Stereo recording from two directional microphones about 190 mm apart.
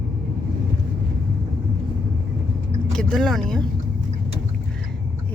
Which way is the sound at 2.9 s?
5° left (ahead or behind).